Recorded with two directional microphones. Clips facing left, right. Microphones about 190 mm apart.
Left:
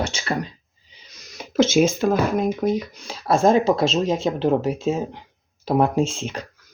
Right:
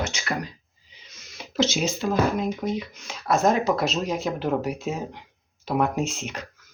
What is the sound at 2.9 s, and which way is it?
Speech, 35° left (ahead or behind).